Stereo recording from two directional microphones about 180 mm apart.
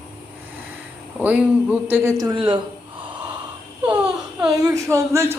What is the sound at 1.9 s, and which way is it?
Speech, 15° right (ahead or behind).